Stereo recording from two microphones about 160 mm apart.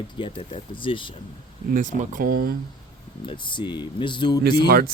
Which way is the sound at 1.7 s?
55° right (ahead or behind).